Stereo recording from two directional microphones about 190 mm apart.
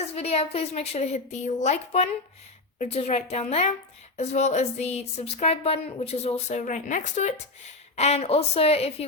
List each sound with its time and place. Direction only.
0.1 s speech: 30° left (ahead or behind)